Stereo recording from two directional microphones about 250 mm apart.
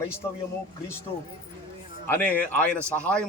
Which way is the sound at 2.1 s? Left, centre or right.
Centre.